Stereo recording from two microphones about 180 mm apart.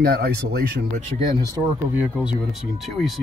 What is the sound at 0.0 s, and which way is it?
Speech, 60° right (ahead or behind).